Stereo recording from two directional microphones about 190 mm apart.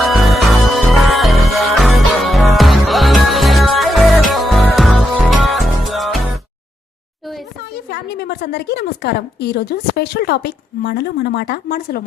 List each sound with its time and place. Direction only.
0.1 s music: centre (ahead or behind)
7.9 s a woman's voice: 60° left (ahead or behind)